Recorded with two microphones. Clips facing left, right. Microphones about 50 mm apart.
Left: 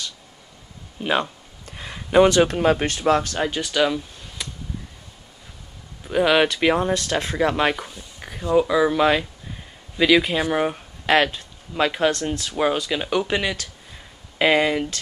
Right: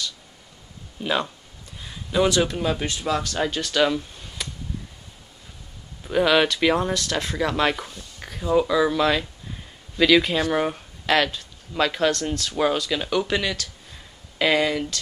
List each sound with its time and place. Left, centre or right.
1.0 s speech: left
1.7 s a sound: left
2.0 s speech: left
3.3 s speech: centre
3.7 s a sound: centre
6.0 s speech: centre
6.9 s speech: left
7.7 s speech: centre
11.1 s speech: left